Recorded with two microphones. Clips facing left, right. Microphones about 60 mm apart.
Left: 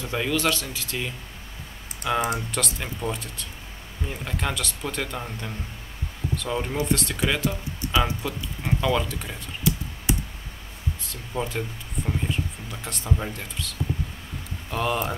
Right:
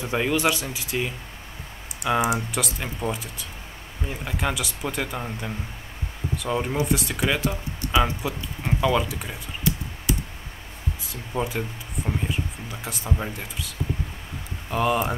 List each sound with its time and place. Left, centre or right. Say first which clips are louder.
0.0 s speech: right 2 dB; centre
10.1 s a sound: even; left
11.1 s speech: right 3 dB; centre